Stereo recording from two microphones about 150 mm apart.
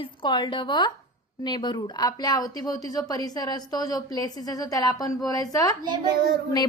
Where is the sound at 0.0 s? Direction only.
35° left (ahead or behind).